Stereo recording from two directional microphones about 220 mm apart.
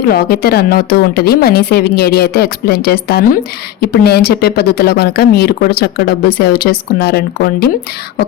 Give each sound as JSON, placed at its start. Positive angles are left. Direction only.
{"t": 0.1, "sound": "speech", "side_deg": 45}